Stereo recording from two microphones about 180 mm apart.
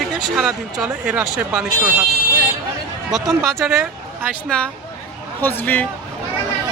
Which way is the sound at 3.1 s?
Centre (ahead or behind).